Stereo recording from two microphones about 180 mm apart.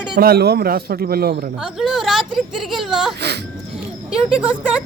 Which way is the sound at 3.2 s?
65° right (ahead or behind).